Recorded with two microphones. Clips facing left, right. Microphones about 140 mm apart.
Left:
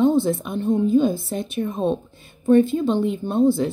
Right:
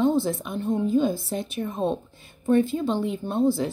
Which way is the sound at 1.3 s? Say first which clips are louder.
Left 4 dB; 20° left (ahead or behind).